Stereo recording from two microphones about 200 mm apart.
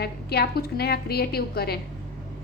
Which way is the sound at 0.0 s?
50° left (ahead or behind).